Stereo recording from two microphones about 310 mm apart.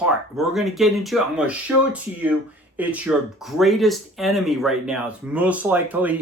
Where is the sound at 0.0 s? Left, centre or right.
Centre.